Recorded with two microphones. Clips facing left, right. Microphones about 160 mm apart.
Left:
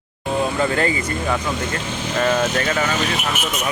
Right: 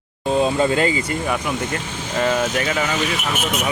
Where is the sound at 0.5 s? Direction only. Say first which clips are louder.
Right 2 dB; 20° right (ahead or behind).